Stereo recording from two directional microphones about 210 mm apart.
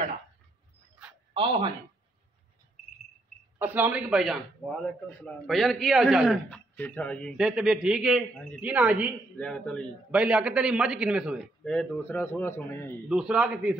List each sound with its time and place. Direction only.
1.3 s speech: 25° right (ahead or behind)
3.5 s a man's voice: 10° right (ahead or behind)
6.7 s a man's voice: 10° left (ahead or behind)
9.4 s a man's voice: 5° left (ahead or behind)
13.1 s a man's voice: 5° right (ahead or behind)